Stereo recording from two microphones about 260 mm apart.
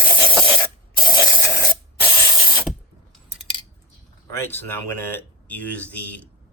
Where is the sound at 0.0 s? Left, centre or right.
Centre.